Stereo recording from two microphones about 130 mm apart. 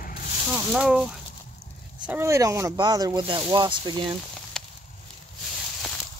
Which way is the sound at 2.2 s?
20° right (ahead or behind).